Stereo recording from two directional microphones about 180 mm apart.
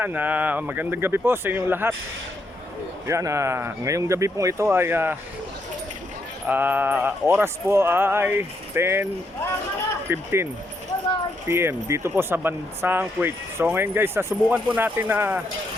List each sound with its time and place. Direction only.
0.0 s speech: 10° right (ahead or behind)
3.1 s speech: 15° right (ahead or behind)
6.5 s speech: 10° right (ahead or behind)
10.1 s speech: 15° right (ahead or behind)